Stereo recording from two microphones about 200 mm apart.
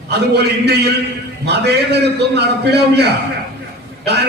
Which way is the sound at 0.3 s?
55° right (ahead or behind).